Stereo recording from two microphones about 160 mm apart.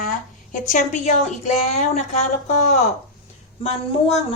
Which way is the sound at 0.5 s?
50° left (ahead or behind).